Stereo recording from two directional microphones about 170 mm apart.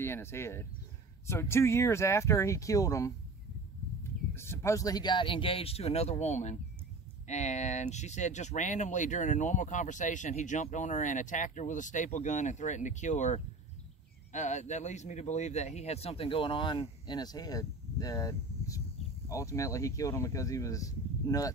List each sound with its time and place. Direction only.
0.0 s speech: 15° left (ahead or behind)
4.4 s a man's voice: 15° left (ahead or behind)